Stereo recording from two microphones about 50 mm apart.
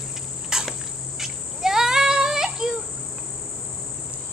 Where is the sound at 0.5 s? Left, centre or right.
Centre.